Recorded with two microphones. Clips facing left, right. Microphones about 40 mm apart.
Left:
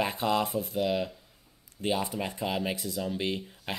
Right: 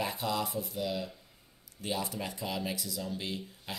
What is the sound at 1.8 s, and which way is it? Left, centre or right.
Speech, left.